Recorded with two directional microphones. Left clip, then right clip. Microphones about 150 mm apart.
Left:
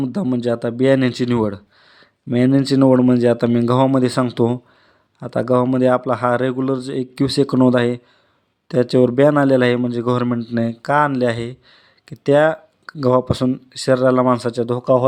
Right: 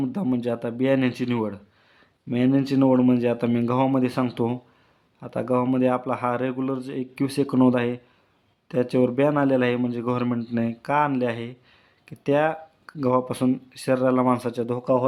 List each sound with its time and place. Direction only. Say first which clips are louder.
0.0 s speech: left 5 dB; 30° left (ahead or behind)